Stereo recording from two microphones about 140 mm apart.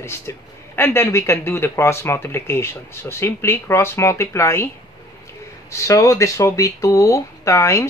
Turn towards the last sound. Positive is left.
turn(degrees=20)  # may be behind; listen again after turning